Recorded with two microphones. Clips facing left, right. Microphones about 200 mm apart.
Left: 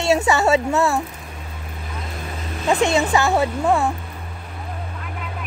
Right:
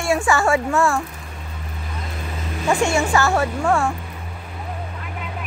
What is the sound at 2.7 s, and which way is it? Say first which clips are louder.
Speech: left 1 dB; 20° left (ahead or behind).